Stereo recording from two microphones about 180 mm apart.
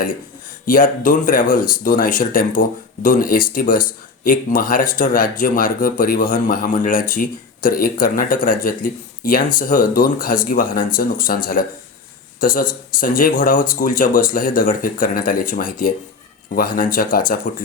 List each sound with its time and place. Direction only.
0.6 s speech: 50° left (ahead or behind)